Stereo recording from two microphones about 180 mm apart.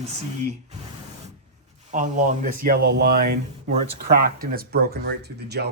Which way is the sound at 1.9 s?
45° right (ahead or behind).